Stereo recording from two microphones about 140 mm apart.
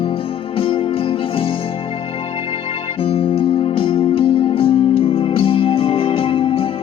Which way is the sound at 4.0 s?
40° left (ahead or behind).